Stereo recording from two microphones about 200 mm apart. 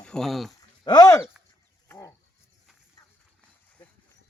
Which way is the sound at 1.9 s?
15° left (ahead or behind).